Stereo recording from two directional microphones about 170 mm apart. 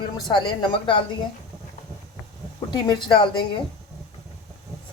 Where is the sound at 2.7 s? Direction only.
25° left (ahead or behind).